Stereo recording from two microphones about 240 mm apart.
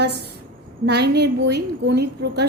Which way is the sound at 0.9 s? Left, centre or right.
Right.